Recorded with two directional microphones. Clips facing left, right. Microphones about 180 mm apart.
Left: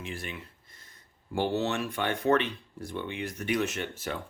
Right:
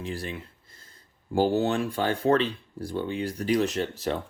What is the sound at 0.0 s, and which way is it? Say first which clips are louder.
Speech: right 5 dB; 35° right (ahead or behind).